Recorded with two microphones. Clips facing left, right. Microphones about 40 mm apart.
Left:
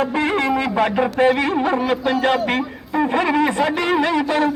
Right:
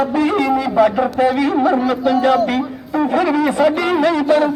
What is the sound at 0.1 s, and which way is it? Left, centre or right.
Music, left.